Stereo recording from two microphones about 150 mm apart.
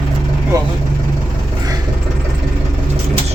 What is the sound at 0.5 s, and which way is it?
Speech, 25° right (ahead or behind).